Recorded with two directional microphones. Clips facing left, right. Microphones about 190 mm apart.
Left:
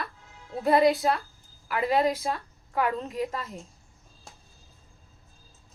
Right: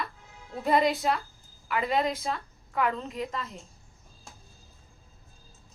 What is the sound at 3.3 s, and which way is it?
Speech, 40° left (ahead or behind).